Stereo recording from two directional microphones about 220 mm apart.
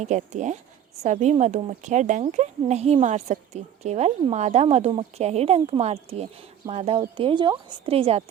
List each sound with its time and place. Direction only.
0.0 s speech: 35° right (ahead or behind)